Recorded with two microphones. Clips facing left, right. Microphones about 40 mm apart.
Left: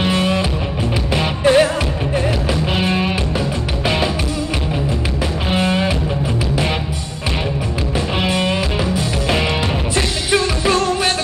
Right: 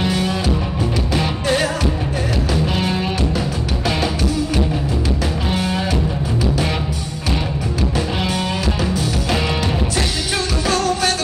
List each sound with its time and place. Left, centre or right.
0.0 s music: left
5.5 s music: left
8.2 s music: left